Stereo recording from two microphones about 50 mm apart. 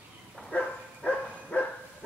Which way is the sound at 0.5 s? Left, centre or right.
Left.